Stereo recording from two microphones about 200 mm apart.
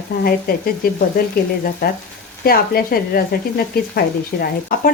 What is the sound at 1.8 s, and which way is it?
Speech, 45° left (ahead or behind).